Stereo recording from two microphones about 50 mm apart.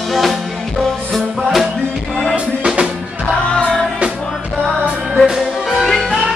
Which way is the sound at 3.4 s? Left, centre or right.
Centre.